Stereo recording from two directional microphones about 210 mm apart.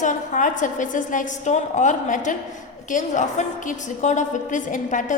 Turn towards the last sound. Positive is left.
turn(degrees=35)  # may be behind; listen again after turning